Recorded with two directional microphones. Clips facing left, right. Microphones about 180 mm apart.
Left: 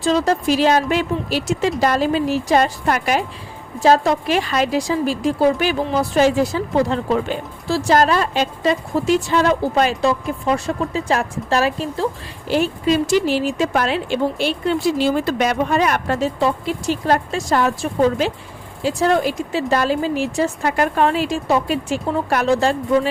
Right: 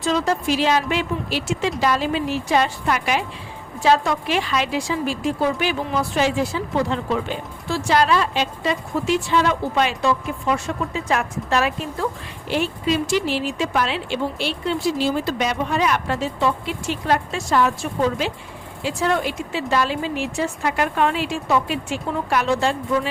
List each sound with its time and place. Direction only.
0.0 s a woman's voice: 35° left (ahead or behind)
18.8 s a woman's voice: 40° left (ahead or behind)